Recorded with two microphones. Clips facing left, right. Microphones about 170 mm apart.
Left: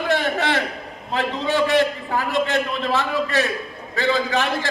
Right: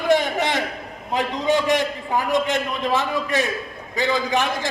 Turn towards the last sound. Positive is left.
turn(degrees=-15)  # may be behind; listen again after turning